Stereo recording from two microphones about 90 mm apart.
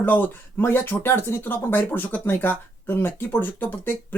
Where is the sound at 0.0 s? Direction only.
20° left (ahead or behind).